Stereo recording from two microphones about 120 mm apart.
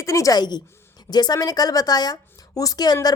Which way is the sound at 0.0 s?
25° left (ahead or behind).